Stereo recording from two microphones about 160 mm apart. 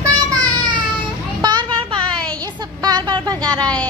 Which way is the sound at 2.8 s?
25° right (ahead or behind).